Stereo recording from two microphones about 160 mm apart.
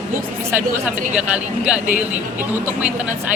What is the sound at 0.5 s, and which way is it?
Speech, 10° right (ahead or behind).